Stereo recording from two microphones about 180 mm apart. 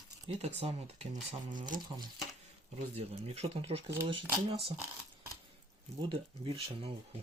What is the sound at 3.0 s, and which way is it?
Speech, 35° right (ahead or behind).